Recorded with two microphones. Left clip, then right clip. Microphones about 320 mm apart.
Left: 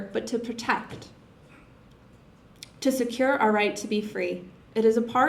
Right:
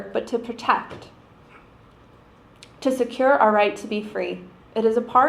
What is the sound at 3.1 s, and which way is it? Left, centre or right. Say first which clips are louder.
A woman's voice: right 7 dB; left.